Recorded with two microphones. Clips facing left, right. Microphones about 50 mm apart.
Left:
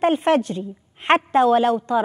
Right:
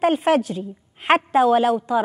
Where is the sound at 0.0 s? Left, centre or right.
Centre.